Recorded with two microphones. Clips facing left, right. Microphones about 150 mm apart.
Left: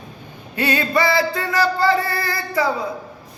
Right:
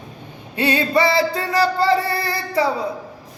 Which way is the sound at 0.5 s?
25° right (ahead or behind).